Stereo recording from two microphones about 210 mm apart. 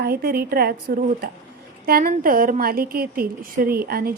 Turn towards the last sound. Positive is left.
turn(degrees=-45)  # may be behind; listen again after turning